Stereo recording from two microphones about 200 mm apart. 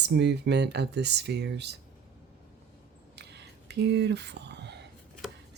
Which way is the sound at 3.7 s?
55° right (ahead or behind).